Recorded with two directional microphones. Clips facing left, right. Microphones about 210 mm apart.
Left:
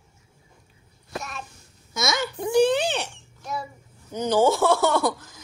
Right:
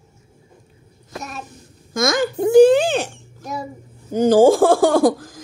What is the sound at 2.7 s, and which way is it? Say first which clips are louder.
Speech: right 8 dB; 90° right.